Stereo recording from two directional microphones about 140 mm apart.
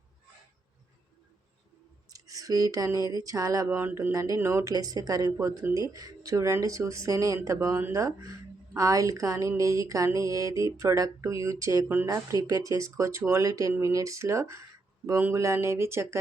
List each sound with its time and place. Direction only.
2.0 s speech: 25° right (ahead or behind)